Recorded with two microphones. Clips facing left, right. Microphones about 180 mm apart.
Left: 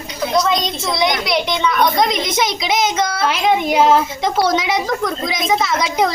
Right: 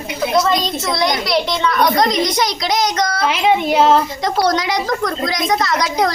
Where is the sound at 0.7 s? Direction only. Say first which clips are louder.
Even; centre (ahead or behind).